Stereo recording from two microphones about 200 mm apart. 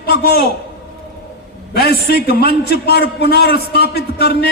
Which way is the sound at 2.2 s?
50° left (ahead or behind).